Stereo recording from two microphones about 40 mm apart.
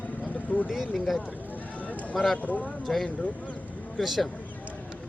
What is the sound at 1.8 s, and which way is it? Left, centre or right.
Run, left.